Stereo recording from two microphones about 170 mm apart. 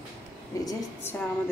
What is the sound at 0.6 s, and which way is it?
Speech, 15° left (ahead or behind).